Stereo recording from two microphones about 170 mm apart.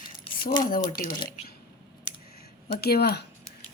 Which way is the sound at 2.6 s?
65° left (ahead or behind).